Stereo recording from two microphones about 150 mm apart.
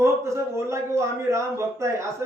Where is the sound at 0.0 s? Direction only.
20° right (ahead or behind).